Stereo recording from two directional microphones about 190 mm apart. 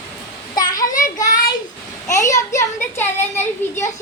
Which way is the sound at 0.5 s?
20° left (ahead or behind).